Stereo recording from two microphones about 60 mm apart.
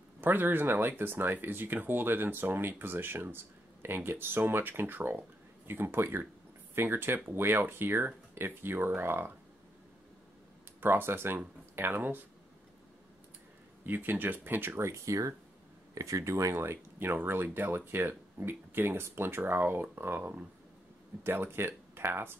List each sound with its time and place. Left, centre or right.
0.2 s speech: right
10.8 s speech: right
13.8 s speech: right